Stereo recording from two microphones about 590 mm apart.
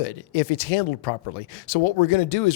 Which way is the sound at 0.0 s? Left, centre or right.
Left.